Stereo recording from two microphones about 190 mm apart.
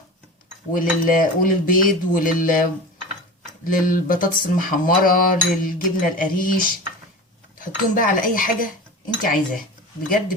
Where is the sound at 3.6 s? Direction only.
45° left (ahead or behind).